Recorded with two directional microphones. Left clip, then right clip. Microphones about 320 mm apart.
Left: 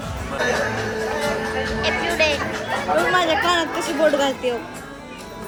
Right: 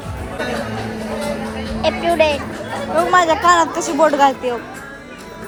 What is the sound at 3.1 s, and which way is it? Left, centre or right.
Speech, right.